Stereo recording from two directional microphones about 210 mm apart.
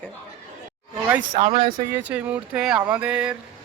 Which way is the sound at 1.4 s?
25° right (ahead or behind).